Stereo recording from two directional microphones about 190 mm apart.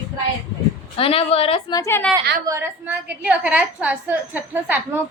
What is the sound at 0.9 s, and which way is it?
Speech, 30° left (ahead or behind).